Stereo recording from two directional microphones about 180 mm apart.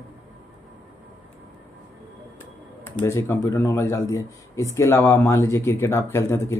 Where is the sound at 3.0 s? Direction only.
15° left (ahead or behind).